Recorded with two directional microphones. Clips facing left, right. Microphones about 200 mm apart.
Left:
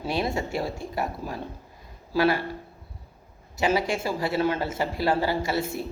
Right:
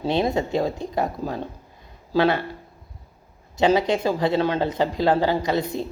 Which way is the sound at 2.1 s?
25° right (ahead or behind).